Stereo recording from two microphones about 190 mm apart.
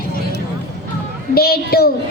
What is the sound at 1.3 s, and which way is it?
Speech, 55° left (ahead or behind).